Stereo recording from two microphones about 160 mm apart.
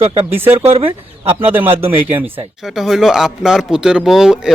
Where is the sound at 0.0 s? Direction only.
40° right (ahead or behind).